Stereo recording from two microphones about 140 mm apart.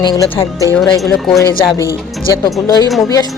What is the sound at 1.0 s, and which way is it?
Speech, centre (ahead or behind).